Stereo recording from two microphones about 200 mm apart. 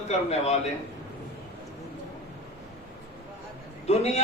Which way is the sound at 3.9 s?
35° left (ahead or behind).